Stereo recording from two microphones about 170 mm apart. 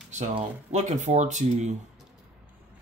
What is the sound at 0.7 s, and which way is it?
Speech, 45° right (ahead or behind).